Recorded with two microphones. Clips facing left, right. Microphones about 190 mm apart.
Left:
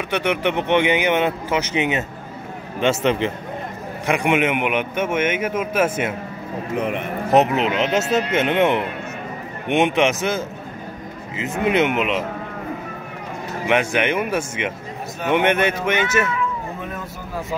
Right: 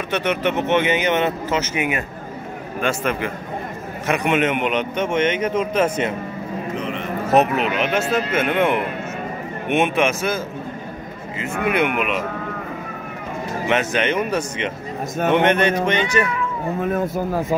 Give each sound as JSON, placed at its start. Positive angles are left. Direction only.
{"t": 0.1, "sound": "speech", "side_deg": 10}
{"t": 4.1, "sound": "speech", "side_deg": 15}
{"t": 6.8, "sound": "a man's voice", "side_deg": 55}
{"t": 7.2, "sound": "speech", "side_deg": 20}
{"t": 13.7, "sound": "speech", "side_deg": 15}
{"t": 16.9, "sound": "speech", "side_deg": -50}